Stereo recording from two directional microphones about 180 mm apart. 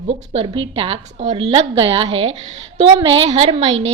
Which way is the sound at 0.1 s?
30° right (ahead or behind).